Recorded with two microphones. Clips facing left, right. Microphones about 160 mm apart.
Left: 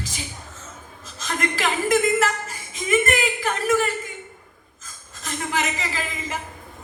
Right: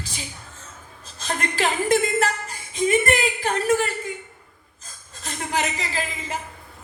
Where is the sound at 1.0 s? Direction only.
35° right (ahead or behind).